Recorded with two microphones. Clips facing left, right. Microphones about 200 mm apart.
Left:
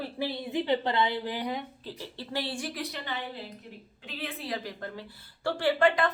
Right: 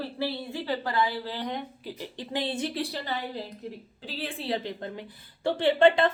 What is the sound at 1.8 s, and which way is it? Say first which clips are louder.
A woman's voice: right 3 dB; 15° right (ahead or behind).